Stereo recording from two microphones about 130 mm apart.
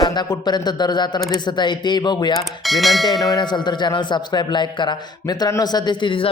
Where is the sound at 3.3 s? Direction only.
35° left (ahead or behind).